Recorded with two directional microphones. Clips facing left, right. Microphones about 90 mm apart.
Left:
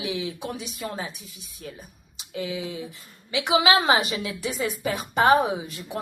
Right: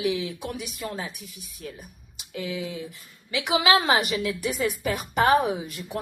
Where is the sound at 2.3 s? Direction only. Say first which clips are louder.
Left 1 dB; 25° left (ahead or behind).